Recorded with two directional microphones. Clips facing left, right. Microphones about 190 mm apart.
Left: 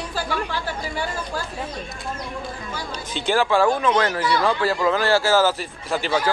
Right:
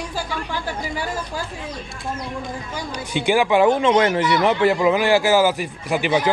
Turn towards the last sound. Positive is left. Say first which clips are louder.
# right 3 dB
turn(degrees=-15)  # may be behind; listen again after turning